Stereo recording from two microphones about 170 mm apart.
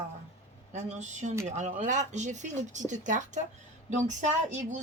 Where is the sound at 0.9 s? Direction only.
45° right (ahead or behind).